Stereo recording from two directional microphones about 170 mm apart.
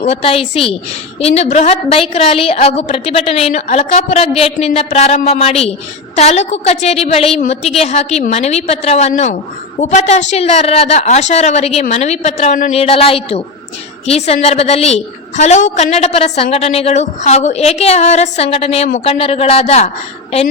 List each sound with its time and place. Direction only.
0.0 s a woman's voice: 35° left (ahead or behind)
12.7 s a woman's voice: 35° left (ahead or behind)